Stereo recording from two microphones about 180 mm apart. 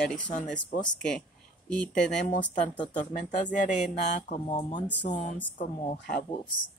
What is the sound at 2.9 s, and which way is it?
Speech, 45° left (ahead or behind).